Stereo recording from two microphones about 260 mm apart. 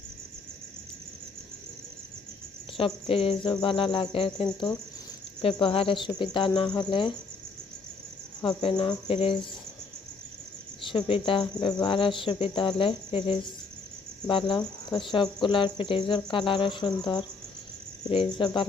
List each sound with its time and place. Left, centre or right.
2.7 s speech: left
6.7 s cricket: centre
8.4 s speech: centre
10.8 s speech: centre